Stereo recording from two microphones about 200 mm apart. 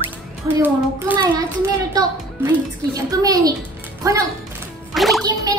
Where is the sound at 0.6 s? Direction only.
10° right (ahead or behind).